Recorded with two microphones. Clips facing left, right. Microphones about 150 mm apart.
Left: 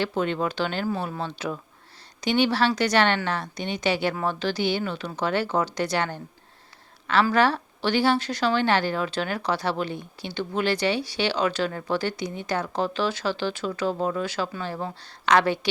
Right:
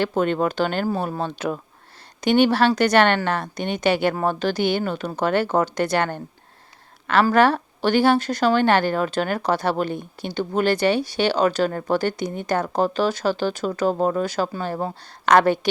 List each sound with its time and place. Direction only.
0.0 s a woman's voice: 50° right (ahead or behind)